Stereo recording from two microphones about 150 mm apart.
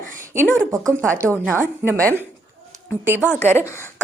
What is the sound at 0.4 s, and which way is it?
A woman's voice, centre (ahead or behind).